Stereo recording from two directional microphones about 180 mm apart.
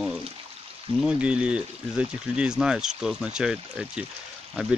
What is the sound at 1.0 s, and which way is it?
Speech, 5° right (ahead or behind).